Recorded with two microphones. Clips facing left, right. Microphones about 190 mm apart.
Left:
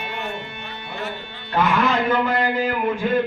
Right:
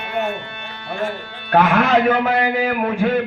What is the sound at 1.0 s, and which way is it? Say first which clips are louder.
A man's voice: right 5 dB; 65° right (ahead or behind).